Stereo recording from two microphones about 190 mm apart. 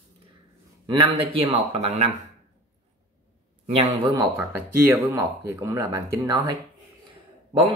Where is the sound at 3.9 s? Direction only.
20° right (ahead or behind).